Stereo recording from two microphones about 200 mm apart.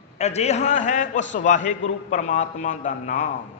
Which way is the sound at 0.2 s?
35° left (ahead or behind).